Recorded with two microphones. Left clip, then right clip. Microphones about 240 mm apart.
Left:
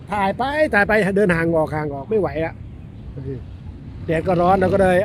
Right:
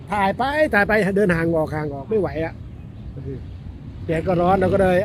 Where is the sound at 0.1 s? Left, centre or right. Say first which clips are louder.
Even; centre.